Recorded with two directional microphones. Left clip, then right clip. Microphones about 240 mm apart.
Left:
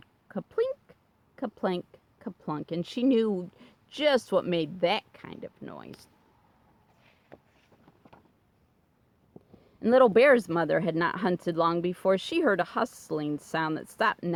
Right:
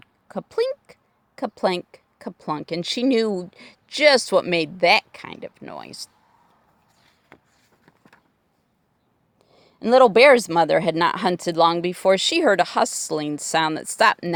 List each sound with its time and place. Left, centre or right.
0.0 s a sound: right
1.4 s speech: right
9.6 s speech: right